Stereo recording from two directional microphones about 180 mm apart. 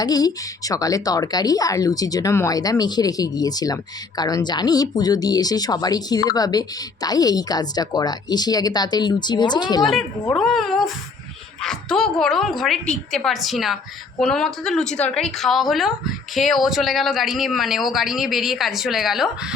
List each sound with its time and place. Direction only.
0.0 s speech: 20° left (ahead or behind)
10.3 s speech: centre (ahead or behind)